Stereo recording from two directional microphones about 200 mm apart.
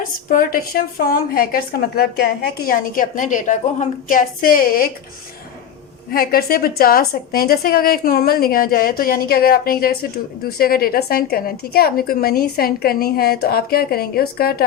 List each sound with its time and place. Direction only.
0.3 s a woman's voice: 45° left (ahead or behind)
6.1 s a woman's voice: 45° left (ahead or behind)